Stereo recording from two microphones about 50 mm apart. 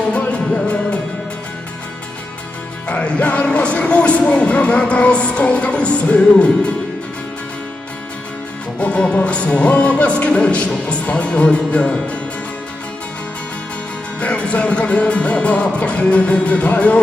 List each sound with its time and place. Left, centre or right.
0.1 s music: left
2.8 s music: left
8.8 s music: left
14.2 s music: left